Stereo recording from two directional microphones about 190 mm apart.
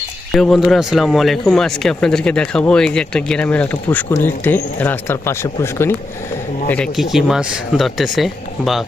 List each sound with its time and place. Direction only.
0.3 s speech: centre (ahead or behind)
6.7 s speech: 5° left (ahead or behind)